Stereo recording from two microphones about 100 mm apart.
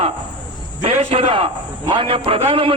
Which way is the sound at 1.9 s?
65° right (ahead or behind).